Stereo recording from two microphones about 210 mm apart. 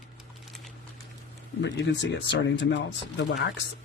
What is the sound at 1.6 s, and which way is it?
Speech, 60° left (ahead or behind).